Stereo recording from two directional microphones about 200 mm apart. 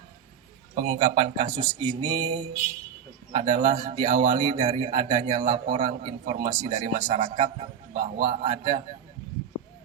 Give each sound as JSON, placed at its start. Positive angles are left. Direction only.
{"t": 0.8, "sound": "a man's voice", "side_deg": -25}